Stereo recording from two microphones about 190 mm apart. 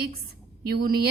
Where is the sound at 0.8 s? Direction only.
55° right (ahead or behind).